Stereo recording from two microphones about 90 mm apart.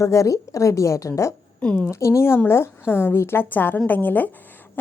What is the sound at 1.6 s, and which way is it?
Speech, 15° left (ahead or behind).